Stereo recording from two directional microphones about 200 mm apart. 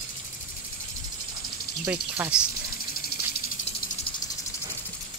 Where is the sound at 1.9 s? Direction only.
5° right (ahead or behind).